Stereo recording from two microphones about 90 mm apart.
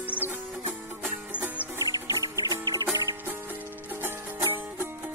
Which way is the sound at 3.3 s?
25° right (ahead or behind).